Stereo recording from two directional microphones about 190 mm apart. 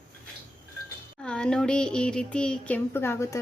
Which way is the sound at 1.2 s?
5° left (ahead or behind).